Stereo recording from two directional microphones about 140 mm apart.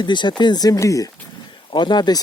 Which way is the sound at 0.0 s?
35° left (ahead or behind).